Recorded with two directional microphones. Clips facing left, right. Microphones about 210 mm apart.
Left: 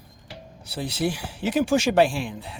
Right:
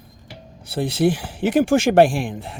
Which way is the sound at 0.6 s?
55° right (ahead or behind).